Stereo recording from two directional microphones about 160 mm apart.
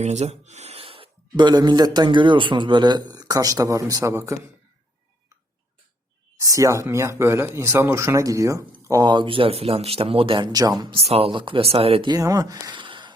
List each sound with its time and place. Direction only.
0.0 s speech: 45° right (ahead or behind); by 4.4 s 20° right (ahead or behind)
6.4 s speech: 20° right (ahead or behind)
10.9 s speech: 40° right (ahead or behind)
12.1 s speech: 20° right (ahead or behind)